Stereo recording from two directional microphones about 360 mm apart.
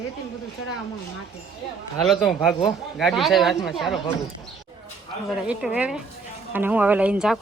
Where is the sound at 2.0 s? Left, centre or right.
Centre.